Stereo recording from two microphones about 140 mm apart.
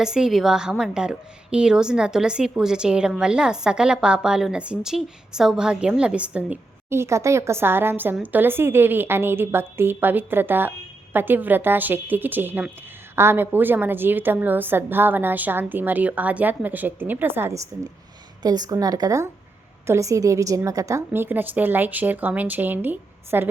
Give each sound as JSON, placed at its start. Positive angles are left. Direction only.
{"t": 0.0, "sound": "a woman's voice", "side_deg": -5}
{"t": 18.4, "sound": "a woman's voice", "side_deg": -30}